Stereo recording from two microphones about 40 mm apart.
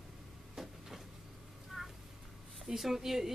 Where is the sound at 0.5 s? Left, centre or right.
Centre.